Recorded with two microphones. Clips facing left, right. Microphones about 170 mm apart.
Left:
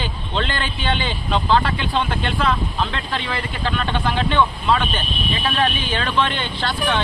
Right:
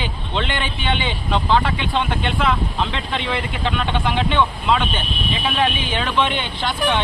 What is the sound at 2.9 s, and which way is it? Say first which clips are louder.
Speech: right 2 dB; 25° right (ahead or behind).